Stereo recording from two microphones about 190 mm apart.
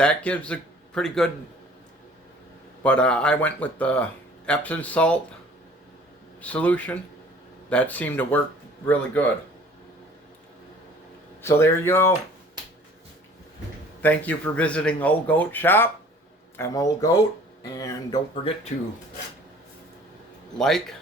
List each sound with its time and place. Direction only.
0.0 s speech: 5° left (ahead or behind)
2.8 s speech: 5° left (ahead or behind)
6.4 s speech: 5° left (ahead or behind)
11.4 s speech: 15° left (ahead or behind)
14.0 s speech: 10° left (ahead or behind)
20.6 s speech: centre (ahead or behind)